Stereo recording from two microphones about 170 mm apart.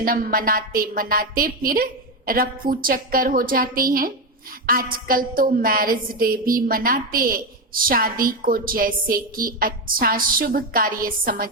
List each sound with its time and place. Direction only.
0.0 s a woman's voice: 55° right (ahead or behind)